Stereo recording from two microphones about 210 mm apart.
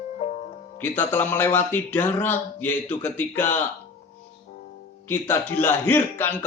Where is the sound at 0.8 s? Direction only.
10° left (ahead or behind).